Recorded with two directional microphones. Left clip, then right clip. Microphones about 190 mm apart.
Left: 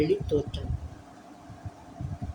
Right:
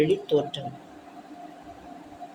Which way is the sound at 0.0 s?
20° left (ahead or behind).